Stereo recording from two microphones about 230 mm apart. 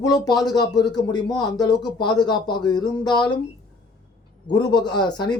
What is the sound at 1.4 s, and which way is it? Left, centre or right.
Speech, centre.